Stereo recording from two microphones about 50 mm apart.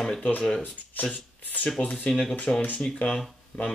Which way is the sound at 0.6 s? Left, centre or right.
Left.